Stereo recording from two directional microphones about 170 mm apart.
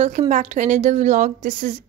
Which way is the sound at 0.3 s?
45° right (ahead or behind).